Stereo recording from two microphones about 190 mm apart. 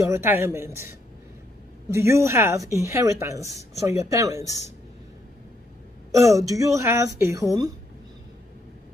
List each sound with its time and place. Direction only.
0.0 s a woman's voice: 15° right (ahead or behind)
6.1 s a woman's voice: 15° right (ahead or behind)